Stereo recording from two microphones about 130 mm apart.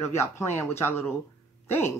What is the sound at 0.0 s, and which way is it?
Speech, 20° left (ahead or behind).